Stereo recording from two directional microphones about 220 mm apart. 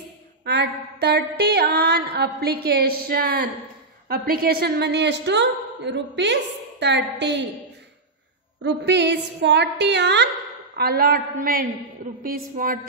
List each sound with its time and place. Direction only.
0.5 s mantra: 50° right (ahead or behind)
8.6 s mantra: 50° right (ahead or behind)
12.2 s a woman's voice: 40° right (ahead or behind)